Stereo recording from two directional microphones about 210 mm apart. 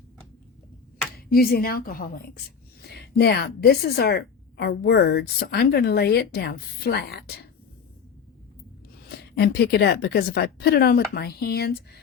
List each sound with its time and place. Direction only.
1.1 s a woman's voice: 45° left (ahead or behind)
9.4 s a woman's voice: 50° left (ahead or behind)